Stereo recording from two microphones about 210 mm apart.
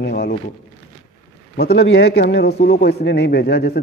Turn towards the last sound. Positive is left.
turn(degrees=50)  # may be behind; listen again after turning